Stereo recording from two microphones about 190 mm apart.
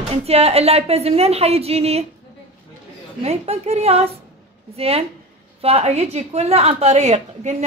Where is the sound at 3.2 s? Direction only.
30° right (ahead or behind).